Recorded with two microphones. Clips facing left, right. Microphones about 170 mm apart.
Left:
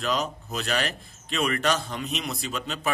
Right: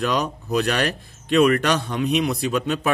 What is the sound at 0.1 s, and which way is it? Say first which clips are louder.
A man's voice: right 6 dB; 65° right (ahead or behind).